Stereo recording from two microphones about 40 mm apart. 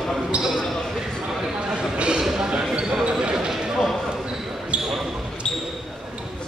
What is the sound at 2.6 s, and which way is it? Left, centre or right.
Basketball bounce, centre.